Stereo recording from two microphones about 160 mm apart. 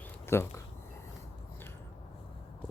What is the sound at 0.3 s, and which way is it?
Speech, 15° left (ahead or behind).